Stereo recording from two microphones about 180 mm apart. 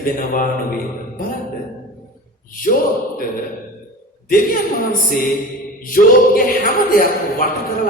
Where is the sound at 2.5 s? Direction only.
50° left (ahead or behind).